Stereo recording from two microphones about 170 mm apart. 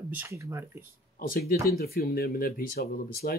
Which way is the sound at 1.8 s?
65° left (ahead or behind).